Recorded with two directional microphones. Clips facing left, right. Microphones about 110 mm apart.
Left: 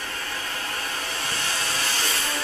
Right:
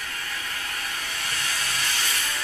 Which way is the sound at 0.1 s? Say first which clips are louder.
Left 2 dB; 30° left (ahead or behind).